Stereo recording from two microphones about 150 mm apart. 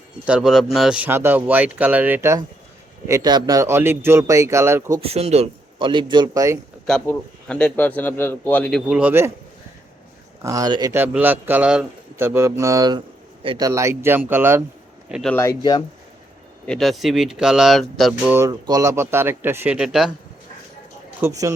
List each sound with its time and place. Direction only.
0.3 s speech: 5° right (ahead or behind)
3.1 s speech: 25° right (ahead or behind)
4.9 s speech: 40° right (ahead or behind)
5.8 s speech: 30° right (ahead or behind)
6.8 s a man's voice: 5° left (ahead or behind)
8.9 s speech: 10° right (ahead or behind)
10.4 s speech: 25° right (ahead or behind)
10.9 s a man's voice: 10° right (ahead or behind); by 13.7 s 35° right (ahead or behind)
13.7 s speech: 20° right (ahead or behind)
15.3 s a man's voice: 15° left (ahead or behind)
16.6 s speech: centre (ahead or behind)
18.3 s speech: 20° right (ahead or behind); by 20.1 s 5° right (ahead or behind)
21.2 s speech: 20° right (ahead or behind)